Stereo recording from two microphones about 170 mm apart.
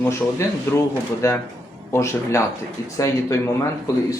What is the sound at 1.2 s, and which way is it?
Speech, 20° left (ahead or behind).